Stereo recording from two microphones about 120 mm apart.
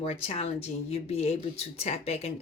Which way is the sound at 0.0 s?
60° left (ahead or behind).